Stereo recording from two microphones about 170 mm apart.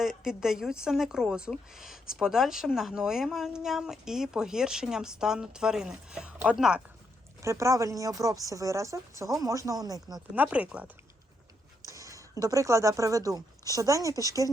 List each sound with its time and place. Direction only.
0.0 s a woman's voice: 5° right (ahead or behind)
7.4 s a woman's voice: 15° right (ahead or behind)
10.2 s speech: 10° right (ahead or behind)
11.9 s a woman's voice: 20° right (ahead or behind)